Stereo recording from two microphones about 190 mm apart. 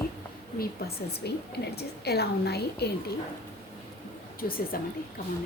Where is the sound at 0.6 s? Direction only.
55° left (ahead or behind).